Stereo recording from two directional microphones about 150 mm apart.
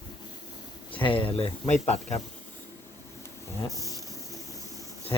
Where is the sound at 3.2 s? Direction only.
20° left (ahead or behind).